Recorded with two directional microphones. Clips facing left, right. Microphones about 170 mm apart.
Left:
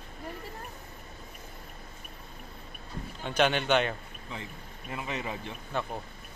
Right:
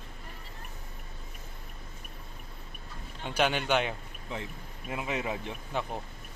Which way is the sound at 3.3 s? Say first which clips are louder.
Left 2 dB; 10° right (ahead or behind).